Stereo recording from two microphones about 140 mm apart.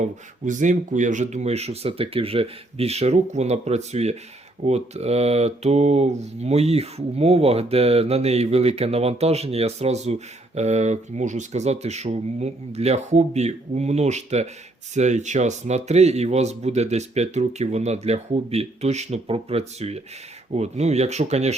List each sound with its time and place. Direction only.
0.0 s speech: 65° right (ahead or behind)